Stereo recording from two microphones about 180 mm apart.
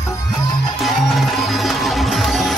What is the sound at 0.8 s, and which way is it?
Music, centre (ahead or behind).